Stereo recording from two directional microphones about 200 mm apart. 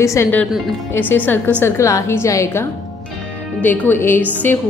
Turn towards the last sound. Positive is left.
turn(degrees=10)  # may be behind; listen again after turning